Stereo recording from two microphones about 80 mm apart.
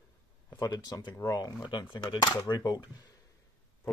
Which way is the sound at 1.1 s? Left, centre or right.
Left.